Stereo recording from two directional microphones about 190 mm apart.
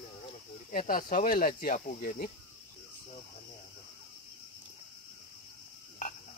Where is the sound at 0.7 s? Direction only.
45° left (ahead or behind).